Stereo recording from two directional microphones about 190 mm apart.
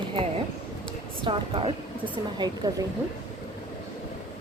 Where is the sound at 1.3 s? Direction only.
30° right (ahead or behind).